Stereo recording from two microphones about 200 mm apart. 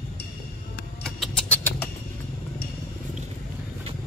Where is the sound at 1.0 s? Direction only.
5° left (ahead or behind).